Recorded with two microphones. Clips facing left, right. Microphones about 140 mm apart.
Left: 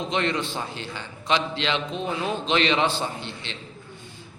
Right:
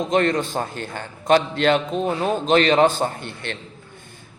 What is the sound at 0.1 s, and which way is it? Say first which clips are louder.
A man's voice: right 7 dB; 45° right (ahead or behind).